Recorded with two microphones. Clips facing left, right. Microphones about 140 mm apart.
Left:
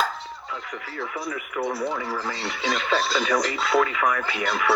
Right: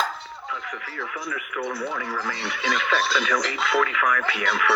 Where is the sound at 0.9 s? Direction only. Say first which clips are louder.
Left 3 dB; 30° left (ahead or behind).